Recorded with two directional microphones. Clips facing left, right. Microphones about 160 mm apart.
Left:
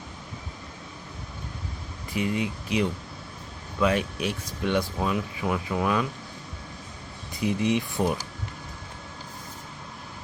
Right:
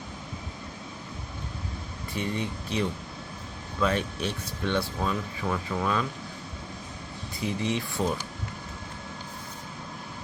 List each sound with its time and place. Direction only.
2.1 s speech: 10° left (ahead or behind)
7.4 s speech: 15° left (ahead or behind)